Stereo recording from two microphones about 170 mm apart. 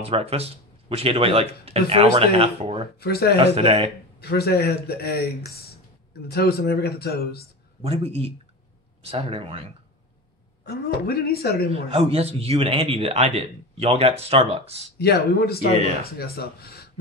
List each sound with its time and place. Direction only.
0.0 s a man's voice: 35° right (ahead or behind)
3.0 s speech: 70° left (ahead or behind)
3.3 s a man's voice: 35° right (ahead or behind)
4.2 s speech: 70° left (ahead or behind)
7.8 s a man's voice: 35° right (ahead or behind)
10.6 s speech: 65° left (ahead or behind)
11.7 s a man's voice: 35° right (ahead or behind)
15.0 s speech: 65° left (ahead or behind)